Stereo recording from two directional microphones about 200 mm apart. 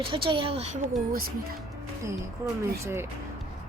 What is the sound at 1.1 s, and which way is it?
Speech, 50° right (ahead or behind).